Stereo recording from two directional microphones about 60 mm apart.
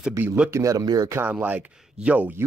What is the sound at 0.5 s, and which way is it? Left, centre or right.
Speech, right.